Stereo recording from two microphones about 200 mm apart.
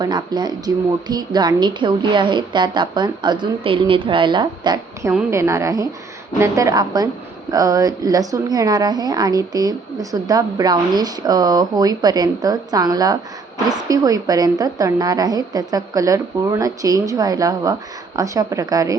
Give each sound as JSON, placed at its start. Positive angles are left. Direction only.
{"t": 0.0, "sound": "a woman's voice", "side_deg": -20}